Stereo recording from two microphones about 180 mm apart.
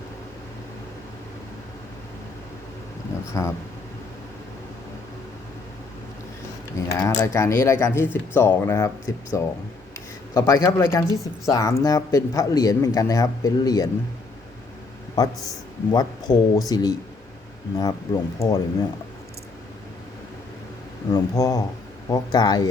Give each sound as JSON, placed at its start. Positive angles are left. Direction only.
{"t": 3.3, "sound": "speech", "side_deg": 15}
{"t": 6.8, "sound": "speech", "side_deg": 20}
{"t": 15.2, "sound": "speech", "side_deg": 20}
{"t": 21.1, "sound": "speech", "side_deg": 20}